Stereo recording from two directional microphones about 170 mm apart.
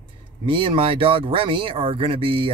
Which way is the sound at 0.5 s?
30° right (ahead or behind).